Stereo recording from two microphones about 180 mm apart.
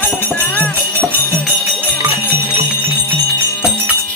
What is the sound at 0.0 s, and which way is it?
Music, 10° left (ahead or behind).